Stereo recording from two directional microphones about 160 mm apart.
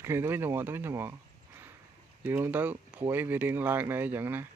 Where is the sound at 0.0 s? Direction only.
15° right (ahead or behind).